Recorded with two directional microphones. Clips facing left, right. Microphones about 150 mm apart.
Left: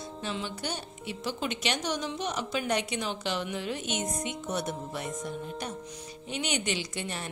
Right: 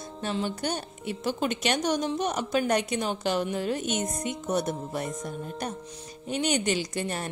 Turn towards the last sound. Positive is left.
turn(degrees=-45)  # may be behind; listen again after turning